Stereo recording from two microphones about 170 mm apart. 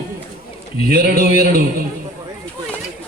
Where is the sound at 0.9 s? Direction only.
60° right (ahead or behind).